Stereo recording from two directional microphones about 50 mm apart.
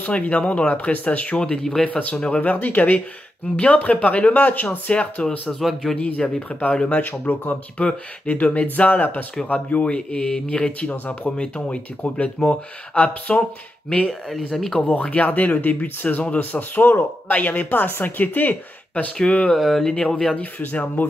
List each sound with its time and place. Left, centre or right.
0.0 s speech: left
1.4 s speech: centre
1.9 s speech: left
5.6 s speech: centre
5.9 s speech: left
7.0 s speech: left
9.8 s speech: centre
14.3 s speech: centre
14.9 s speech: left
19.5 s speech: centre
20.3 s speech: left
20.8 s speech: left